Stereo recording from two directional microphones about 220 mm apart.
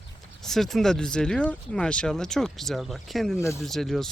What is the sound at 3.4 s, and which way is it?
Speech, 10° left (ahead or behind).